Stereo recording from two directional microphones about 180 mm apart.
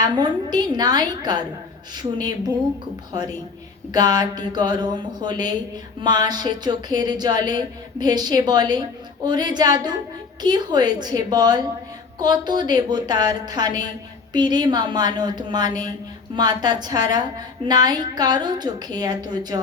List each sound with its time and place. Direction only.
0.1 s speech: 25° right (ahead or behind)
3.9 s speech: 20° right (ahead or behind)